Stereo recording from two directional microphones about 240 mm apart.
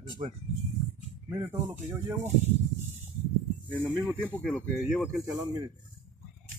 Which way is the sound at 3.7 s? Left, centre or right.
Centre.